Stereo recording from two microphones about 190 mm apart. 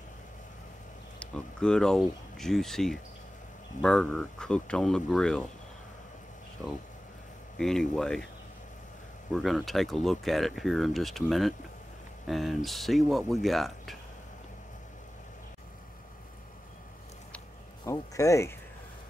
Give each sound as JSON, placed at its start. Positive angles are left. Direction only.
{"t": 1.2, "sound": "speech", "side_deg": 5}
{"t": 7.5, "sound": "speech", "side_deg": 5}
{"t": 9.3, "sound": "speech", "side_deg": 0}
{"t": 17.8, "sound": "speech", "side_deg": 15}